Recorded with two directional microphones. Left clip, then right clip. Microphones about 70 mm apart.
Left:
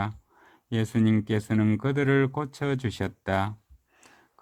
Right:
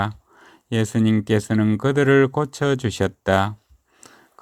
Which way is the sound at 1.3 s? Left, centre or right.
Right.